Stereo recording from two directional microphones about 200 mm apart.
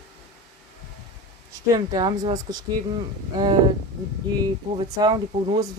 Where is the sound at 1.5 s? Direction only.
20° right (ahead or behind).